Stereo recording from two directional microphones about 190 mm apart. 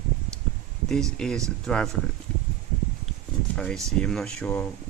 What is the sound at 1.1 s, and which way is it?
Speech, 5° left (ahead or behind).